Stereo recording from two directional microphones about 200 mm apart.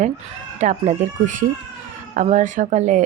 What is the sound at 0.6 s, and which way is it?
A woman's voice, 35° right (ahead or behind).